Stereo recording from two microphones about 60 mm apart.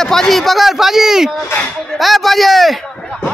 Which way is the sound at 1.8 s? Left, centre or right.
Centre.